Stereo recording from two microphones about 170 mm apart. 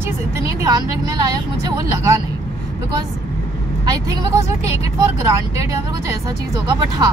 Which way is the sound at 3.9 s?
20° right (ahead or behind).